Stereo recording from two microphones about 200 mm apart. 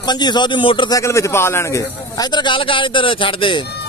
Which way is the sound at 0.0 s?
20° left (ahead or behind).